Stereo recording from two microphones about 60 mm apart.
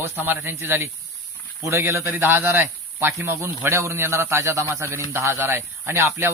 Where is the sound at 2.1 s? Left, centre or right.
Right.